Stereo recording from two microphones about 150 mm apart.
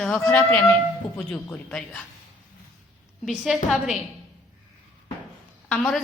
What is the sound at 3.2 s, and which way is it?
Speech, centre (ahead or behind).